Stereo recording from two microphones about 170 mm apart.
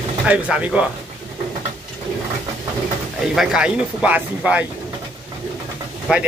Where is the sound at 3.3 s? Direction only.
5° right (ahead or behind).